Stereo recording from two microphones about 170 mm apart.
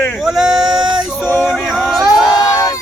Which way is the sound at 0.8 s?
25° right (ahead or behind).